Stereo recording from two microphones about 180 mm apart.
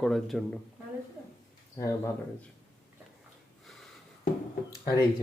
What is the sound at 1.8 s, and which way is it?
Speech, 15° left (ahead or behind).